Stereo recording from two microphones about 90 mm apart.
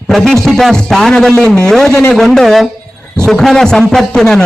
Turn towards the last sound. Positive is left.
turn(degrees=5)  # may be behind; listen again after turning